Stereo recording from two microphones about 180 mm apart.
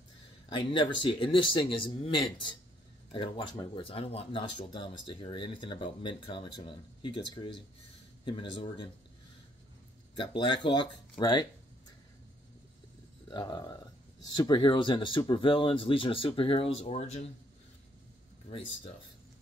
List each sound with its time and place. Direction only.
0.5 s speech: 25° left (ahead or behind)
10.1 s speech: 30° left (ahead or behind)
13.3 s speech: 25° left (ahead or behind)